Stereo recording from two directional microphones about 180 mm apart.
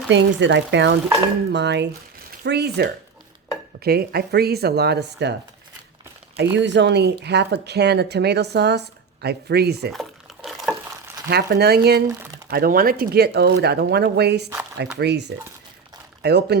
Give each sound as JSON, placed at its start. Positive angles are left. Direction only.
{"t": 0.1, "sound": "speech", "side_deg": -90}
{"t": 6.6, "sound": "speech", "side_deg": -75}
{"t": 9.9, "sound": "stir", "side_deg": 0}
{"t": 11.3, "sound": "speech", "side_deg": -65}